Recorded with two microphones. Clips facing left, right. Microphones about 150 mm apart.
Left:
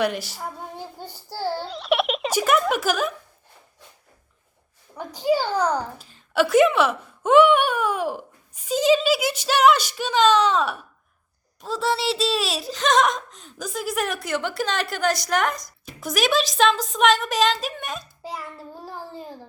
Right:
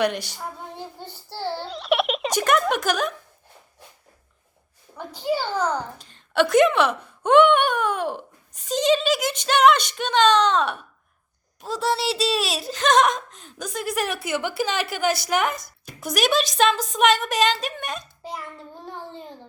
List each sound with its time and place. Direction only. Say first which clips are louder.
0.0 s speech: right 1 dB; centre (ahead or behind)
0.9 s child singing: left 2 dB; 10° left (ahead or behind)
1.6 s a sound: right 2 dB; centre (ahead or behind)
4.9 s a child's voice: left 4 dB; 10° left (ahead or behind)